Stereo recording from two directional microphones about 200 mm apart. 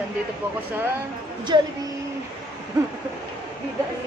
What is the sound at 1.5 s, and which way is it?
Speech, 20° right (ahead or behind).